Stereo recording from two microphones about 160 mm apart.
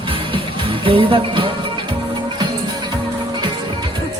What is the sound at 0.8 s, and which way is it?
Music, 35° right (ahead or behind).